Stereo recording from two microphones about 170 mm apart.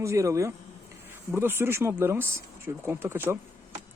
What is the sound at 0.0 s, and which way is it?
Speech, 15° right (ahead or behind).